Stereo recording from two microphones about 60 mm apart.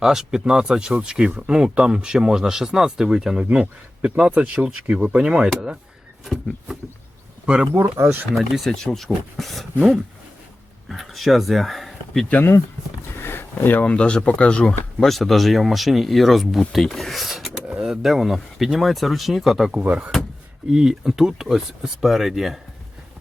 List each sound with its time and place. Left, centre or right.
0.0 s speech: centre
7.4 s speech: centre
7.7 s speech: right
8.4 s speech: centre
10.8 s speech: centre
13.2 s a sound: left
13.8 s speech: centre
15.0 s speech: centre
19.7 s speech: right
20.7 s speech: centre